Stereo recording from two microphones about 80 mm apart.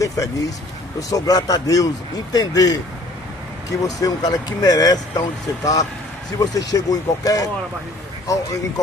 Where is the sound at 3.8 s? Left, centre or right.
Left.